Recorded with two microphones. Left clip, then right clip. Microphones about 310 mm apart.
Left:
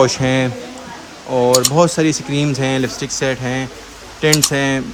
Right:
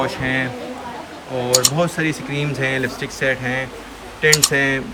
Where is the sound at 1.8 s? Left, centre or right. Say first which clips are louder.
Left 6 dB; centre.